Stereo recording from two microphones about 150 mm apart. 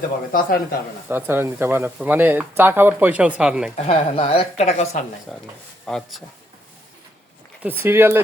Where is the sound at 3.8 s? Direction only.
40° left (ahead or behind).